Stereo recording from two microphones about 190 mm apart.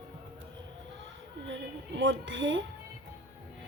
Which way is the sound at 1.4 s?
75° right (ahead or behind).